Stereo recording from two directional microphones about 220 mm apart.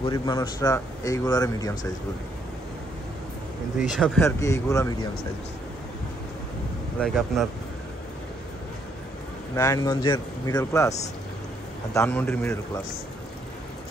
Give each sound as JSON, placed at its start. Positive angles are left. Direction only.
{"t": 0.0, "sound": "a man's voice", "side_deg": 20}
{"t": 3.8, "sound": "speech", "side_deg": 0}
{"t": 4.4, "sound": "a man's voice", "side_deg": 15}
{"t": 7.0, "sound": "speech", "side_deg": 0}
{"t": 9.6, "sound": "a man's voice", "side_deg": 15}